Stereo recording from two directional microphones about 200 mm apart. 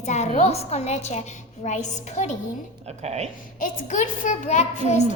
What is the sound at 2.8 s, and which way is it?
Speech, 30° right (ahead or behind).